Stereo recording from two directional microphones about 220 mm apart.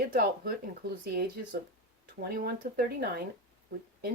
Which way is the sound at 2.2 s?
40° right (ahead or behind).